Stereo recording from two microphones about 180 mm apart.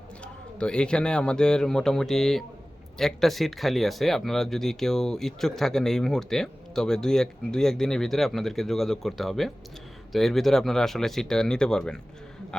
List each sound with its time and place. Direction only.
0.6 s speech: 5° left (ahead or behind)